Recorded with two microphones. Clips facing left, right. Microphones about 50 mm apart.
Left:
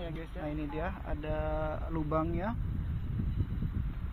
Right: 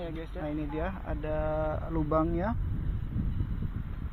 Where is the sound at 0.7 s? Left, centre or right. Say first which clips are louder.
Right 3 dB; right.